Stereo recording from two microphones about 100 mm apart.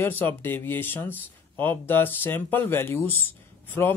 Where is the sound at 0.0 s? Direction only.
20° left (ahead or behind).